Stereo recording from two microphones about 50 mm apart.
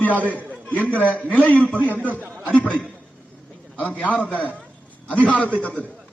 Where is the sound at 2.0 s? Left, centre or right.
Right.